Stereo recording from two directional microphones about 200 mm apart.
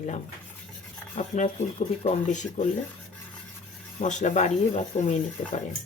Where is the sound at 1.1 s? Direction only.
35° left (ahead or behind).